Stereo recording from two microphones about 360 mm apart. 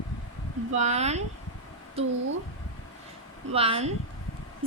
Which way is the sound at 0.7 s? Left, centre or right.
Centre.